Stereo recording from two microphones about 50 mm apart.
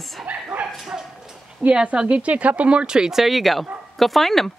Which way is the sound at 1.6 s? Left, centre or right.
Right.